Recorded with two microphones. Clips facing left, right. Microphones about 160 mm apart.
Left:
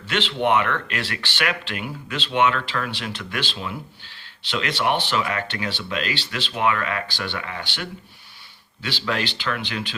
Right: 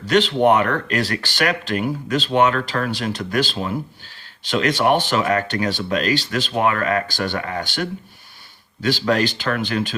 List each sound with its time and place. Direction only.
0.0 s speech: 40° right (ahead or behind)